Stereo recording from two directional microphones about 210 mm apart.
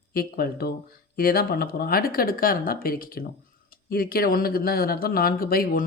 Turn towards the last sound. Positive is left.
turn(degrees=45)  # may be behind; listen again after turning